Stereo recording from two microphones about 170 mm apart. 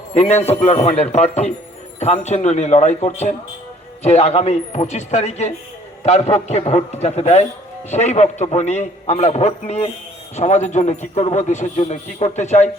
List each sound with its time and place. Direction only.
0.1 s a man's voice: 40° left (ahead or behind)